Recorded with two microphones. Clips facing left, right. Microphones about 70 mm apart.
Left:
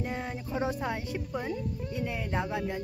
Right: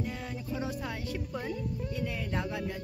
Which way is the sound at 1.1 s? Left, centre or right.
Centre.